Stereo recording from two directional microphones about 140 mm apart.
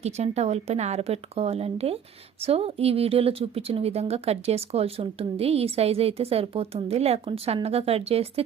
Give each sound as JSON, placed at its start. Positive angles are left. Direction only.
{"t": 0.0, "sound": "a woman's voice", "side_deg": -50}